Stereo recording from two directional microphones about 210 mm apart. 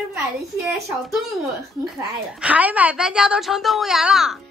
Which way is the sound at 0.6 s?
Centre (ahead or behind).